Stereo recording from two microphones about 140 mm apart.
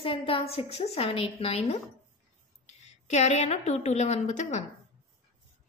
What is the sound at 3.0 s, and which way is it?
A woman's voice, 55° left (ahead or behind).